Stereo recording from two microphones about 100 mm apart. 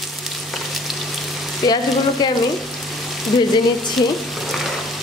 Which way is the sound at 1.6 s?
40° left (ahead or behind).